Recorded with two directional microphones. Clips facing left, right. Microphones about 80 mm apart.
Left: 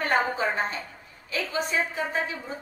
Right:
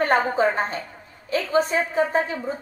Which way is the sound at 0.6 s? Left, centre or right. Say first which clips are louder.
Right 3 dB; right.